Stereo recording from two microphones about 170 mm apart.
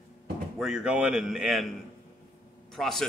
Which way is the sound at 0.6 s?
5° right (ahead or behind).